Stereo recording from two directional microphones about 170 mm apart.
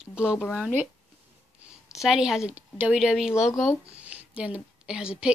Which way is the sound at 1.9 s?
5° right (ahead or behind).